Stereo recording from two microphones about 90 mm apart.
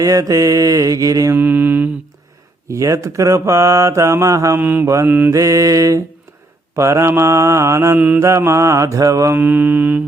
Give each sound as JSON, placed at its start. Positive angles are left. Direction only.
{"t": 0.0, "sound": "speech", "side_deg": -40}
{"t": 1.4, "sound": "mantra", "side_deg": -20}
{"t": 2.6, "sound": "speech", "side_deg": -35}
{"t": 4.5, "sound": "mantra", "side_deg": -20}
{"t": 5.3, "sound": "speech", "side_deg": -35}
{"t": 7.9, "sound": "mantra", "side_deg": -20}
{"t": 8.2, "sound": "speech", "side_deg": -30}
{"t": 9.3, "sound": "mantra", "side_deg": -20}